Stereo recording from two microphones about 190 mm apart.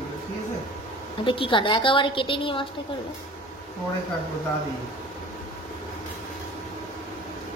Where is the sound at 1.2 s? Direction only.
25° left (ahead or behind).